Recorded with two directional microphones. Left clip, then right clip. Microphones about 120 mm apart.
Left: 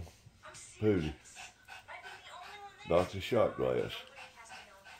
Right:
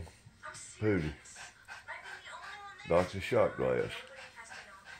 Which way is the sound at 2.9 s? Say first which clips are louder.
Right 1 dB; 15° left (ahead or behind).